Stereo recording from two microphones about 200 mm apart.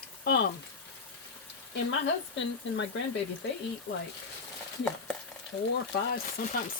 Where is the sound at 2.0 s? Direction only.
65° left (ahead or behind).